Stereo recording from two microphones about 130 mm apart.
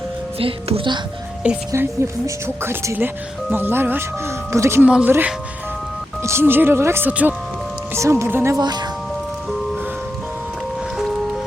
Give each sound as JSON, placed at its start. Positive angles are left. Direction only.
{"t": 0.3, "sound": "speech", "side_deg": -45}
{"t": 1.7, "sound": "speech", "side_deg": -20}
{"t": 4.9, "sound": "speech", "side_deg": -10}
{"t": 6.2, "sound": "speech", "side_deg": -20}
{"t": 8.5, "sound": "speech", "side_deg": -35}